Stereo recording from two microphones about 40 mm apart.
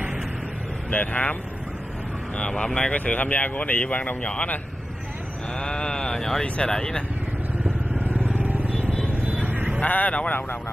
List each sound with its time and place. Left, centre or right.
0.8 s speech: left
2.3 s speech: left
3.1 s speech: left
5.6 s speech: left
6.4 s speech: left
6.7 s speech: centre
7.6 s vehicle: right
8.4 s vehicle: right
9.8 s speech: left